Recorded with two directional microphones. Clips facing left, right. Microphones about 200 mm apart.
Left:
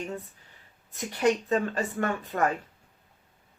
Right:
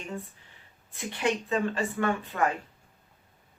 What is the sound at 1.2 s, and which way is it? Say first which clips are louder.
Speech: left 3 dB; 40° left (ahead or behind).